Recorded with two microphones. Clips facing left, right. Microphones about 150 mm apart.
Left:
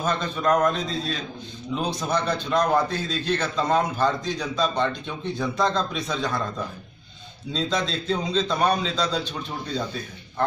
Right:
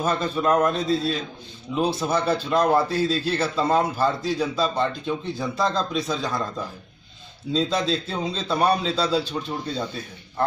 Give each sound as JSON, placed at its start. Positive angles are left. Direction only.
{"t": 0.0, "sound": "a man's voice", "side_deg": -10}
{"t": 7.5, "sound": "a man's voice", "side_deg": -5}